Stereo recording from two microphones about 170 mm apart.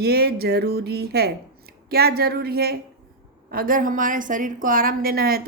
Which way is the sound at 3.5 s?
55° right (ahead or behind).